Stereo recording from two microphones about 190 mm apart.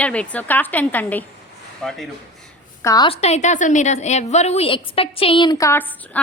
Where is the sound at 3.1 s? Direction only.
35° left (ahead or behind).